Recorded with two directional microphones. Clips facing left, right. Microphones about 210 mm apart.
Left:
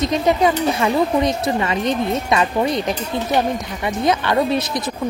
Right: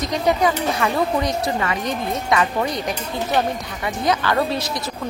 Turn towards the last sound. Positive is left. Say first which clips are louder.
# left 3 dB
turn(degrees=20)  # may be behind; listen again after turning